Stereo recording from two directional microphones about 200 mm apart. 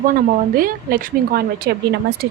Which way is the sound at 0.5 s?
45° right (ahead or behind).